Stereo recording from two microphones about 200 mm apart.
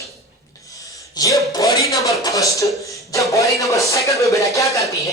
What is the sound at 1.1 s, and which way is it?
Speech, 15° left (ahead or behind).